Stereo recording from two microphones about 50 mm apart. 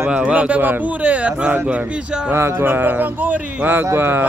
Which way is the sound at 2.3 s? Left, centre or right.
Right.